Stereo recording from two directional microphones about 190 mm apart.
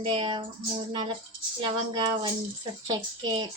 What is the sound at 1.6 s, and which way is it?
A woman's voice, 25° right (ahead or behind).